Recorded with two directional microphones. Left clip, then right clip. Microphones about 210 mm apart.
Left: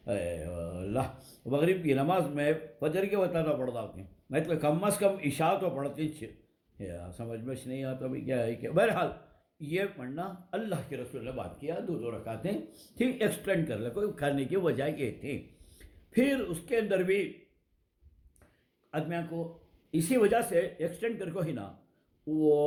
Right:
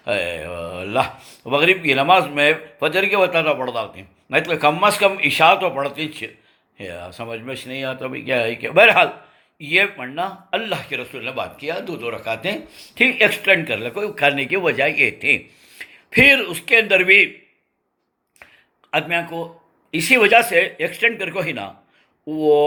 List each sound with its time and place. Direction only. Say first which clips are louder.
0.0 s mantra: right 12 dB; 10° left (ahead or behind)
0.3 s speech: right 11 dB; 10° left (ahead or behind)
16.2 s speech: right 19 dB; 10° left (ahead or behind)
18.9 s speech: right 15 dB; 5° left (ahead or behind)
22.3 s speech: right 9 dB; 15° right (ahead or behind)